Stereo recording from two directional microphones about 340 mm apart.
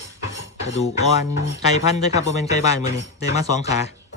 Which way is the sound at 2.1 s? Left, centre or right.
Centre.